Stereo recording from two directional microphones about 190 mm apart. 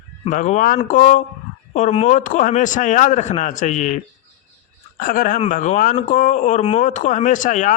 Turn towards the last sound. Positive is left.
turn(degrees=40)  # may be behind; listen again after turning